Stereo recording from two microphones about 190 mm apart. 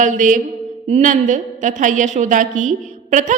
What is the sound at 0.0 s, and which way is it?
A woman's voice, 40° right (ahead or behind).